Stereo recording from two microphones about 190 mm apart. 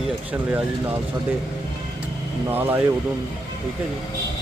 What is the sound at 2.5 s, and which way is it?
Speech, 10° right (ahead or behind).